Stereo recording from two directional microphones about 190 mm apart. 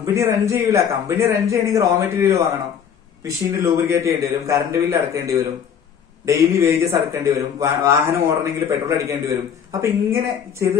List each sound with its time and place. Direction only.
0.0 s a man's voice: 15° right (ahead or behind)